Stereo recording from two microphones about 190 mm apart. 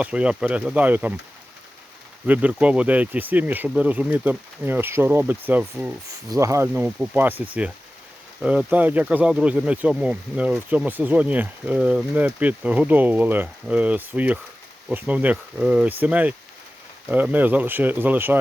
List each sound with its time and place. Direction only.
0.0 s speech: 5° right (ahead or behind)
2.2 s speech: 5° right (ahead or behind)
6.1 s speech: 20° right (ahead or behind)